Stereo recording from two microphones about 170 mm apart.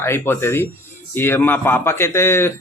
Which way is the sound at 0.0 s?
15° left (ahead or behind).